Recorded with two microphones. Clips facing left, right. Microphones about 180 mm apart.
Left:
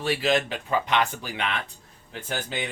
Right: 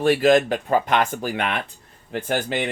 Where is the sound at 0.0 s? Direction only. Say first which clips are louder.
Right 8 dB; 50° right (ahead or behind).